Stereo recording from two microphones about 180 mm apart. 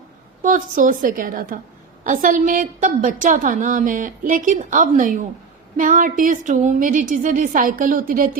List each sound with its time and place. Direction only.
0.4 s a woman's voice: 45° right (ahead or behind)